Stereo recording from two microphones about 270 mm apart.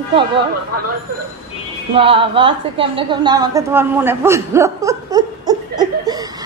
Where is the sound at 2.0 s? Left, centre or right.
Centre.